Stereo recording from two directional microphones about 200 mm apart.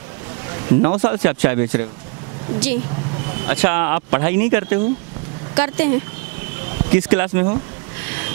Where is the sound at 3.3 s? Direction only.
15° right (ahead or behind).